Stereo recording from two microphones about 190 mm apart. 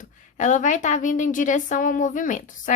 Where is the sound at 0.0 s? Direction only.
40° left (ahead or behind).